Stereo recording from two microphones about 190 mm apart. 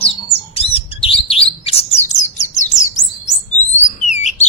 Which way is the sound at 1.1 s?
30° left (ahead or behind).